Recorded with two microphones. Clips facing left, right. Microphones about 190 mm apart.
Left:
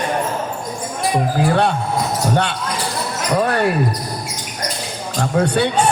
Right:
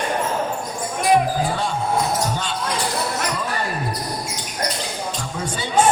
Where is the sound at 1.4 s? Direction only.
65° left (ahead or behind).